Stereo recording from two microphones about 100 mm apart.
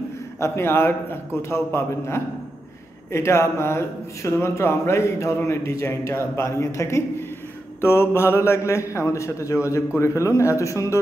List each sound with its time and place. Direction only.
0.4 s a man's voice: 25° left (ahead or behind)